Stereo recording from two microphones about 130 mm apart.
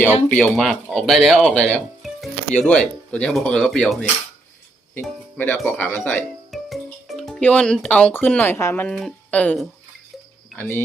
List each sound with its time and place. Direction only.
0.3 s speech: 10° left (ahead or behind)
5.4 s speech: 10° left (ahead or behind)
6.5 s speech: centre (ahead or behind); by 8.9 s 15° left (ahead or behind)
8.9 s speech: 5° left (ahead or behind)
10.6 s speech: 15° left (ahead or behind)